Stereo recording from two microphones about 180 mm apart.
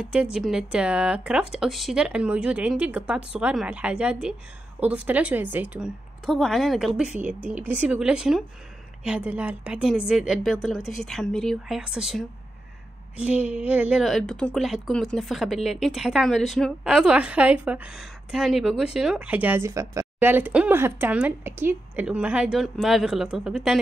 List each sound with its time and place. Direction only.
0.0 s a woman's voice: 5° right (ahead or behind)